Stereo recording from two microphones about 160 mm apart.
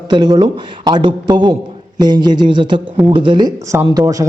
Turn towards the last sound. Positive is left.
turn(degrees=-20)  # may be behind; listen again after turning